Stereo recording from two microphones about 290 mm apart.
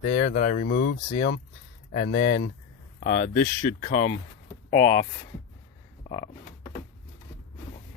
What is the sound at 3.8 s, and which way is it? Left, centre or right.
Speech, left.